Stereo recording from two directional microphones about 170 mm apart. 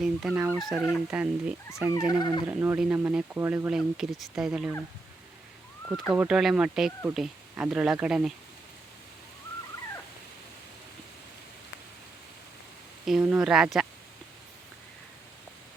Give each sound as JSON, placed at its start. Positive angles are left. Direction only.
{"t": 0.0, "sound": "fowl", "side_deg": -5}
{"t": 0.6, "sound": "speech", "side_deg": 0}
{"t": 1.9, "sound": "dog", "side_deg": 20}
{"t": 2.5, "sound": "speech", "side_deg": -10}
{"t": 5.9, "sound": "speech", "side_deg": 0}
{"t": 13.1, "sound": "speech", "side_deg": 0}